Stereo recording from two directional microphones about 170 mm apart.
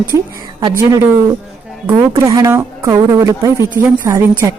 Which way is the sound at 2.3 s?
20° right (ahead or behind).